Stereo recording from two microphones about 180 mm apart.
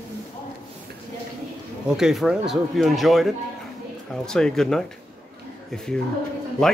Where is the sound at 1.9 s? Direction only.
5° right (ahead or behind).